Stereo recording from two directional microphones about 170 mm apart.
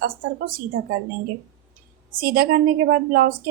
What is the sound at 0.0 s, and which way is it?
Speech, 60° right (ahead or behind).